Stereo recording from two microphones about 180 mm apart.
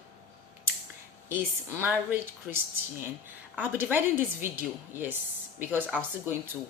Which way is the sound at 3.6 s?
10° right (ahead or behind).